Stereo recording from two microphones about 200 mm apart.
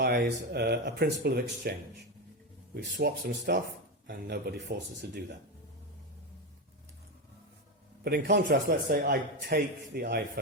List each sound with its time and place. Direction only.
0.0 s a man's voice: 50° right (ahead or behind)
2.7 s a man's voice: 55° right (ahead or behind)
8.0 s a man's voice: 55° right (ahead or behind)